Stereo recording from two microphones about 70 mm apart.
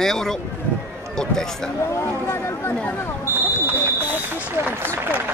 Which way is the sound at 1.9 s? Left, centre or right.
Left.